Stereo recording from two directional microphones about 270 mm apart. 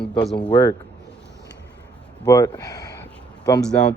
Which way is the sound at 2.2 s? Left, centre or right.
Centre.